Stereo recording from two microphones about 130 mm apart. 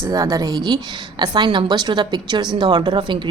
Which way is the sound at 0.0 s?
25° right (ahead or behind).